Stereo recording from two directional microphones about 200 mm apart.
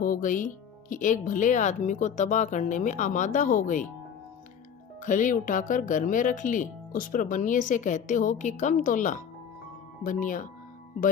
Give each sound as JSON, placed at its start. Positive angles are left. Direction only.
{"t": 0.0, "sound": "speech", "side_deg": 40}
{"t": 5.0, "sound": "speech", "side_deg": 40}